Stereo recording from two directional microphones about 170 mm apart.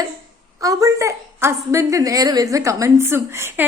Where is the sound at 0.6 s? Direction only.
20° right (ahead or behind).